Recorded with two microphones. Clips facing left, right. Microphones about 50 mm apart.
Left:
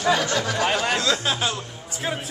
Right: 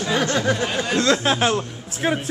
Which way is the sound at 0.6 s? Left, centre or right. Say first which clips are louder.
Left 1 dB; left.